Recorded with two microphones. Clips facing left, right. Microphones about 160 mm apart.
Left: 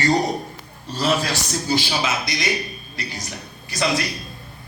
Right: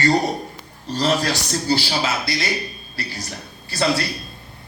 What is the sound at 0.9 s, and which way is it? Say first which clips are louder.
A man's voice: right 1 dB; 10° left (ahead or behind).